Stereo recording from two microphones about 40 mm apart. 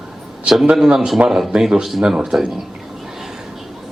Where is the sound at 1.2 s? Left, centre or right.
Right.